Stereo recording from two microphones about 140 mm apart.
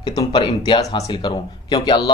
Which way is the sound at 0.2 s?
40° left (ahead or behind).